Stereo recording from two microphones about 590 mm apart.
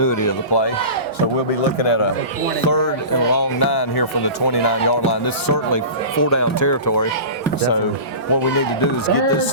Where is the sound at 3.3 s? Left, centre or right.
Left.